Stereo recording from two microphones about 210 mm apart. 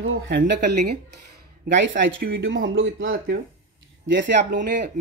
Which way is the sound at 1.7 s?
55° right (ahead or behind).